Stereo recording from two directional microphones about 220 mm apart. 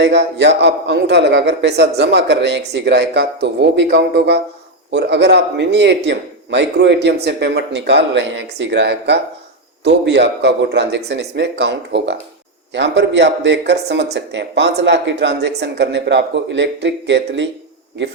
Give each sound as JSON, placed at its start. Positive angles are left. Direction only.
{"t": 0.0, "sound": "speech", "side_deg": -50}